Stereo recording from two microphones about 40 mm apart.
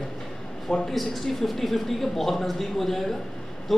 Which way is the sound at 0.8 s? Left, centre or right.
Centre.